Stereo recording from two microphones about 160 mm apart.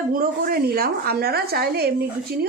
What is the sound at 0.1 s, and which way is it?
A woman's voice, 60° right (ahead or behind).